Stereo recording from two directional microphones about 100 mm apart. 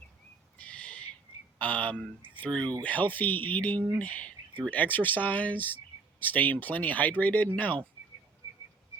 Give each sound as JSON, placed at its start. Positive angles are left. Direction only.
{"t": 0.6, "sound": "owl", "side_deg": 15}
{"t": 1.5, "sound": "speech", "side_deg": 15}